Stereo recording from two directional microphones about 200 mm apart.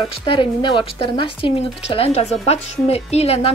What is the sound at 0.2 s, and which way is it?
A woman's voice, 25° left (ahead or behind).